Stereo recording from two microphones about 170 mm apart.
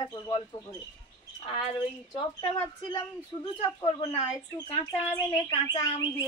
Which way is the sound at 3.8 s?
35° left (ahead or behind).